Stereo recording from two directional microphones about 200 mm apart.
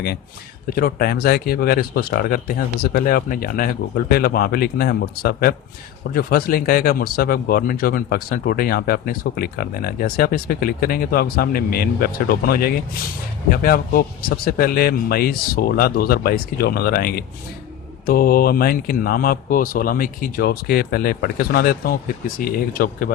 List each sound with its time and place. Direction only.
0.7 s speech: 50° left (ahead or behind)